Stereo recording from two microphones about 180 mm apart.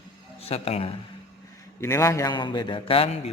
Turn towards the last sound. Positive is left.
turn(degrees=30)  # may be behind; listen again after turning